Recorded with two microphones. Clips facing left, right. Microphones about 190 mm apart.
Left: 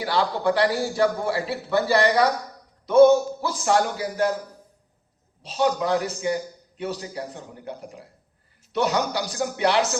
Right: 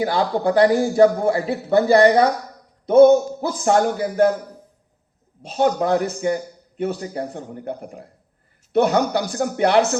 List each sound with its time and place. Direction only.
0.0 s a man's voice: 45° right (ahead or behind)
5.4 s a man's voice: 50° right (ahead or behind)